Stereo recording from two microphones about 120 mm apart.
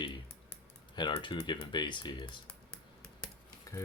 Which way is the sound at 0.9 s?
40° left (ahead or behind).